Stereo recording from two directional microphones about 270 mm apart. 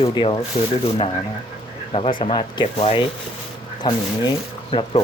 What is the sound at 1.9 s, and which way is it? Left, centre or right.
Speech, left.